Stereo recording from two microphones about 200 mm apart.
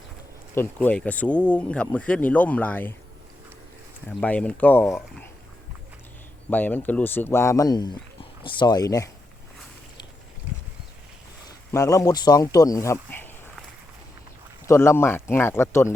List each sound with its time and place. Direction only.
0.5 s speech: 10° left (ahead or behind)
4.1 s speech: 5° left (ahead or behind)
6.5 s speech: 10° left (ahead or behind)
11.7 s speech: 15° left (ahead or behind)
14.7 s speech: 10° left (ahead or behind)